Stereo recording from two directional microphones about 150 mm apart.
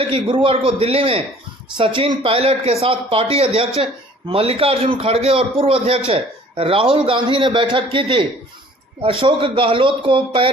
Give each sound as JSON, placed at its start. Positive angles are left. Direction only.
{"t": 0.1, "sound": "a man's voice", "side_deg": -35}
{"t": 2.2, "sound": "a man's voice", "side_deg": -40}